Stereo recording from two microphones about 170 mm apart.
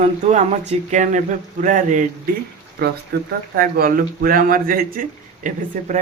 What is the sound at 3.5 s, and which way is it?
Speech, 60° right (ahead or behind).